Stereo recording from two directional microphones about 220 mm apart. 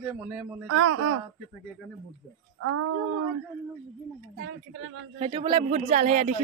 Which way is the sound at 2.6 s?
80° right.